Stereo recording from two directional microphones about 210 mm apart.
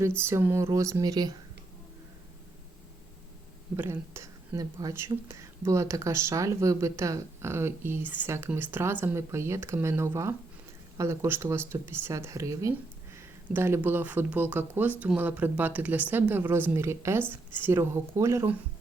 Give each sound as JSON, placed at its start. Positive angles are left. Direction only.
{"t": 0.2, "sound": "speech", "side_deg": -10}
{"t": 3.8, "sound": "speech", "side_deg": -10}